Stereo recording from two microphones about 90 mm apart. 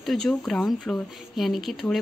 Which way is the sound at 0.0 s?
Centre (ahead or behind).